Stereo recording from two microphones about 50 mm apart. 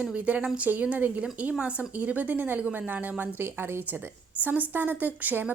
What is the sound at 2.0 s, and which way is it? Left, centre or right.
Speech, right.